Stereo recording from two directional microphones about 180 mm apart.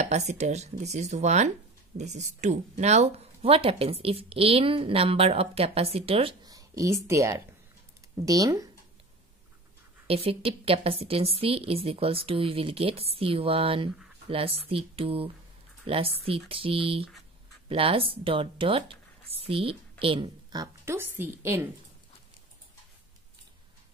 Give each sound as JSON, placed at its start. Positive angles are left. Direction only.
{"t": 0.0, "sound": "a woman's voice", "side_deg": -40}
{"t": 10.0, "sound": "a woman's voice", "side_deg": -30}